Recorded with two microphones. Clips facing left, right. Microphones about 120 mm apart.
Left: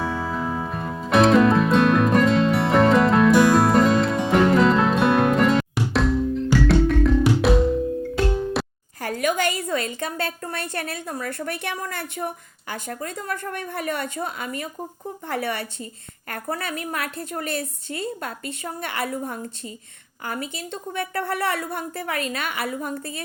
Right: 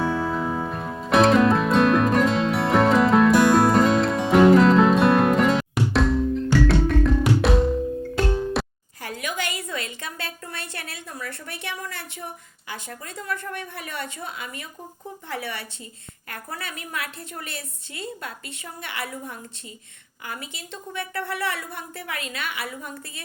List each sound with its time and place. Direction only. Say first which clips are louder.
0.0 s music: right 2 dB; centre (ahead or behind)
9.0 s a woman's voice: left 7 dB; 45° left (ahead or behind)